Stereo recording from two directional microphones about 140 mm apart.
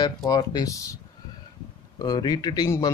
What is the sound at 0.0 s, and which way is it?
Speech, 30° left (ahead or behind).